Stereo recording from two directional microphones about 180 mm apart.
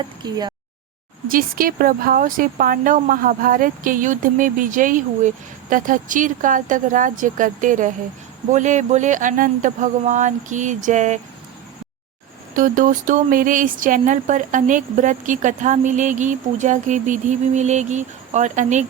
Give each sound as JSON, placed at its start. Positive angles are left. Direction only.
{"t": 0.3, "sound": "speech", "side_deg": -20}
{"t": 1.3, "sound": "speech", "side_deg": -50}
{"t": 12.5, "sound": "speech", "side_deg": -45}